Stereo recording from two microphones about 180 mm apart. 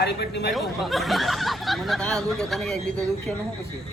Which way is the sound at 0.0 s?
70° left (ahead or behind).